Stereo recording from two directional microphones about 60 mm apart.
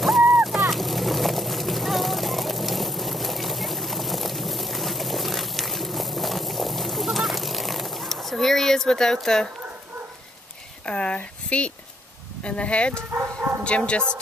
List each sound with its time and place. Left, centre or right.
0.3 s vehicle: centre
10.9 s speech: centre